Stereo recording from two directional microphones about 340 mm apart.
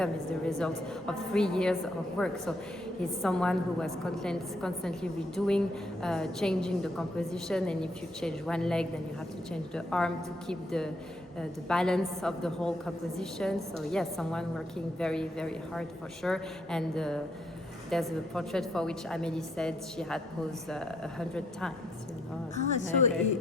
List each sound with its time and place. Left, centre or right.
0.0 s a woman's voice: centre
22.5 s speech: left